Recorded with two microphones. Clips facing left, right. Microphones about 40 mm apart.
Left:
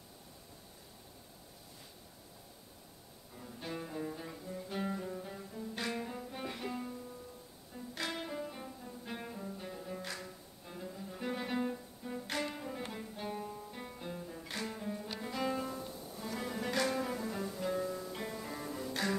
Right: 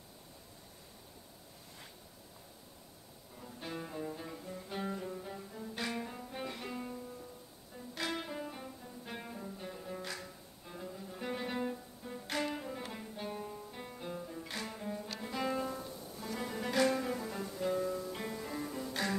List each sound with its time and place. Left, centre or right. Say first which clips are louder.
3.3 s music: left 1 dB; centre
4.9 s cello: even; centre
5.6 s music: left 1 dB; centre